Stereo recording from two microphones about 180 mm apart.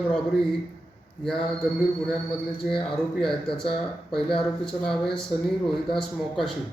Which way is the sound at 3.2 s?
5° left (ahead or behind).